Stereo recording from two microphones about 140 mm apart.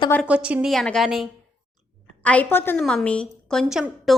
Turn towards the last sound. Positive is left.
turn(degrees=0)  # may be behind; listen again after turning